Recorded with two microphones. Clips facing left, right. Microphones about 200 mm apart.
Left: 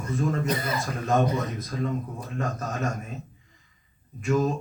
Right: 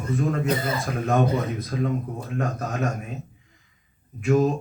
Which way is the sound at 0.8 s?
60° right (ahead or behind).